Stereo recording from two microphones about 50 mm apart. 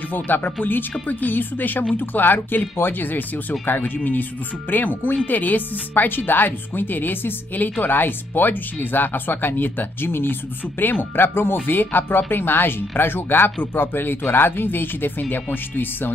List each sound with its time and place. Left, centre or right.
0.1 s speech: left